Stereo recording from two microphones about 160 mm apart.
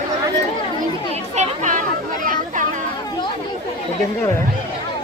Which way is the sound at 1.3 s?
50° right (ahead or behind).